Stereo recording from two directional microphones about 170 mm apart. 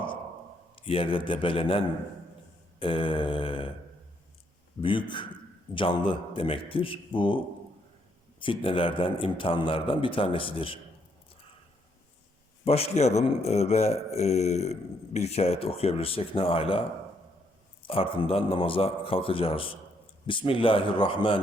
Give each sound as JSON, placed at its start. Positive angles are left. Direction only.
{"t": 0.8, "sound": "speech", "side_deg": 30}
{"t": 4.8, "sound": "a man's voice", "side_deg": 30}
{"t": 12.6, "sound": "speech", "side_deg": 35}
{"t": 17.8, "sound": "speech", "side_deg": 35}